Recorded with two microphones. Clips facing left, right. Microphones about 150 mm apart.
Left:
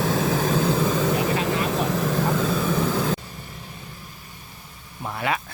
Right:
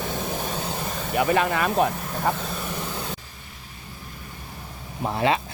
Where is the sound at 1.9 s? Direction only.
90° left.